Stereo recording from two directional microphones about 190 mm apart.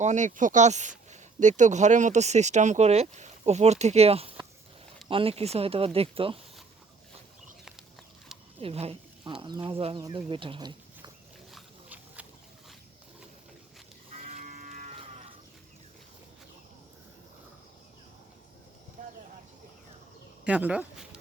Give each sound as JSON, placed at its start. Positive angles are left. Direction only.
{"t": 0.0, "sound": "speech", "side_deg": -40}
{"t": 8.6, "sound": "speech", "side_deg": -30}
{"t": 11.5, "sound": "wild animals", "side_deg": -5}
{"t": 14.3, "sound": "livestock", "side_deg": -40}
{"t": 19.0, "sound": "a sound", "side_deg": -40}
{"t": 20.4, "sound": "a sound", "side_deg": -5}